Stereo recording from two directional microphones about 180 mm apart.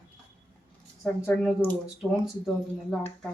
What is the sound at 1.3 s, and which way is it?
Speech, 5° left (ahead or behind).